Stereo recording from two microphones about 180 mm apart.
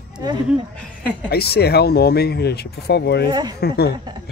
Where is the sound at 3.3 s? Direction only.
25° right (ahead or behind).